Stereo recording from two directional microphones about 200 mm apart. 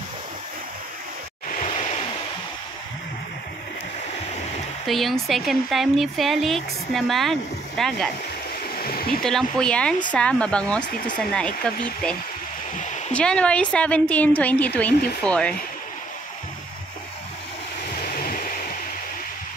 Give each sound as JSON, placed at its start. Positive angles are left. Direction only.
{"t": 1.5, "sound": "waves", "side_deg": 35}
{"t": 4.8, "sound": "speech", "side_deg": 0}
{"t": 8.7, "sound": "stream", "side_deg": 50}
{"t": 9.2, "sound": "speech", "side_deg": 0}
{"t": 13.1, "sound": "a woman's voice", "side_deg": 5}
{"t": 18.1, "sound": "a sound", "side_deg": 45}